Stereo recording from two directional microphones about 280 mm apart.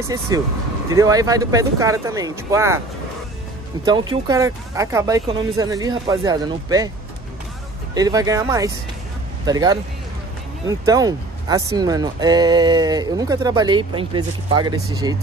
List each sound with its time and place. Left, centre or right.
0.3 s speech: centre
3.8 s speech: centre
7.9 s speech: centre